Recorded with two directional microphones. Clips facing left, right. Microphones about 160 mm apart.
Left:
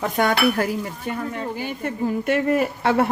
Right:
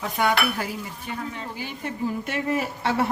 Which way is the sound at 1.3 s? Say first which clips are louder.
Left 6 dB; 50° left (ahead or behind).